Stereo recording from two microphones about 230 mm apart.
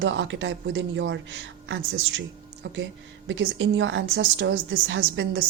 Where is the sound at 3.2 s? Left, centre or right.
Right.